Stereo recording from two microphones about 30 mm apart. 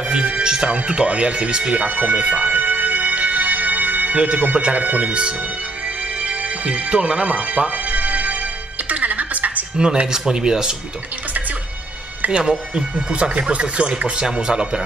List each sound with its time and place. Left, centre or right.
0.4 s speech: right
1.9 s speech: right
2.6 s music: right
3.2 s music: right
4.1 s speech: right
4.8 s speech: right
6.2 s music: right
9.8 s speech: right
12.3 s speech: right
14.3 s speech: right